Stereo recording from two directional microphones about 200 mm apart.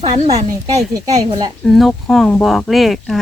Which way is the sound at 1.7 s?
Centre (ahead or behind).